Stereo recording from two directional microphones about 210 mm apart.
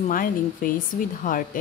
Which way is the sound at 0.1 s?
40° left (ahead or behind).